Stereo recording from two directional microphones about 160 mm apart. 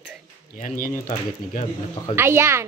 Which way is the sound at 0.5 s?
55° left (ahead or behind).